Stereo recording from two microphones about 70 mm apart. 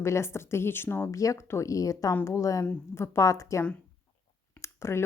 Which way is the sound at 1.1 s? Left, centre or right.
Left.